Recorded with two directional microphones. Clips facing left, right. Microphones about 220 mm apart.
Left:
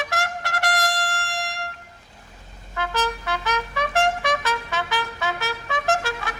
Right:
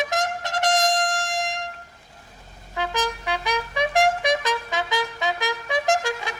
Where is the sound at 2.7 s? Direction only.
15° right (ahead or behind).